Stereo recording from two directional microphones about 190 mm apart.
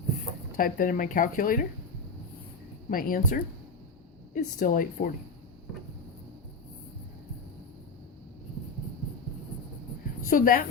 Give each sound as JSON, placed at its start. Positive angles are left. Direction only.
{"t": 0.5, "sound": "speech", "side_deg": 45}
{"t": 2.9, "sound": "speech", "side_deg": 50}
{"t": 10.2, "sound": "speech", "side_deg": 45}